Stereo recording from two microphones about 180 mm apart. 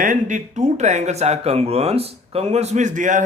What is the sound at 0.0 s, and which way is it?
Speech, 45° right (ahead or behind).